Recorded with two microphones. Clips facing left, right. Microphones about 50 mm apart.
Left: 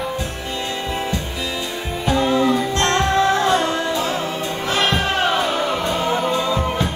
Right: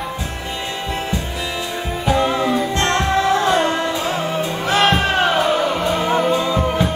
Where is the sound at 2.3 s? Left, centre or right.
Centre.